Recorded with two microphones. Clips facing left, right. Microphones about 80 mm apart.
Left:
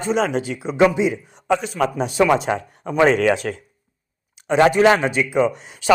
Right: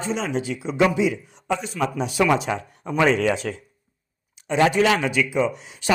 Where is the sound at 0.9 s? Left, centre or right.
Left.